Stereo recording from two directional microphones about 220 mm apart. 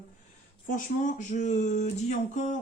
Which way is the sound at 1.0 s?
35° left (ahead or behind).